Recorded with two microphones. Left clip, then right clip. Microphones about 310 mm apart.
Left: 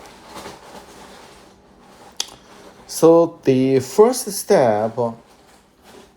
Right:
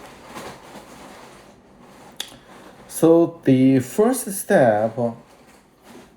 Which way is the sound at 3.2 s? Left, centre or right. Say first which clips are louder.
Left 1 dB; centre.